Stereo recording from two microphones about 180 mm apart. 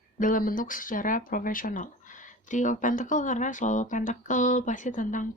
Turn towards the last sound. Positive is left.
turn(degrees=45)  # may be behind; listen again after turning